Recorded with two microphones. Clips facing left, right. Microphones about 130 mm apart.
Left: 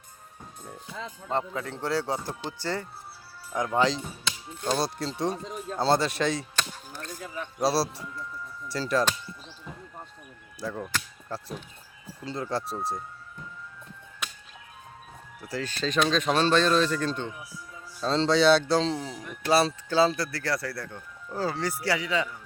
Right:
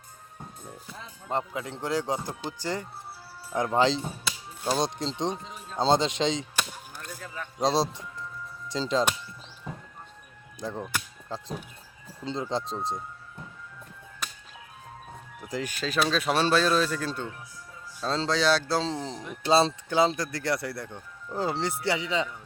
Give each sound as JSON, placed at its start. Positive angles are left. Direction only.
{"t": 1.3, "sound": "speech", "side_deg": -15}
{"t": 3.5, "sound": "speech", "side_deg": -30}
{"t": 4.2, "sound": "speech", "side_deg": -5}
{"t": 10.6, "sound": "speech", "side_deg": -20}
{"t": 15.4, "sound": "speech", "side_deg": -15}
{"t": 18.7, "sound": "speech", "side_deg": -15}
{"t": 19.5, "sound": "speech", "side_deg": -25}